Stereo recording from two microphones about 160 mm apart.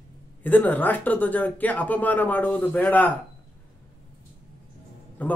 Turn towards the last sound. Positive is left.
turn(degrees=10)  # may be behind; listen again after turning